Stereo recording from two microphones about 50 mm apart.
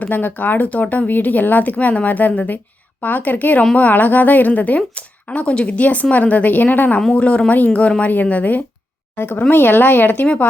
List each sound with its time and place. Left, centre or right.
0.0 s speech: left
9.1 s speech: left
10.2 s speech: left